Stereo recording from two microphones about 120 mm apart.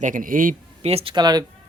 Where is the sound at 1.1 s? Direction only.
35° right (ahead or behind).